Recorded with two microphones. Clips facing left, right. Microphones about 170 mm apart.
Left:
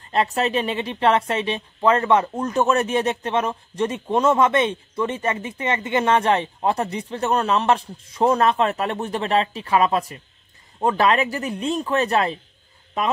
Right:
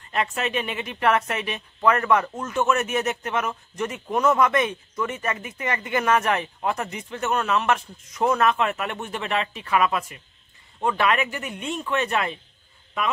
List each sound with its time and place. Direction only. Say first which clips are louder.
0.1 s a woman's voice: left 5 dB; 35° left (ahead or behind)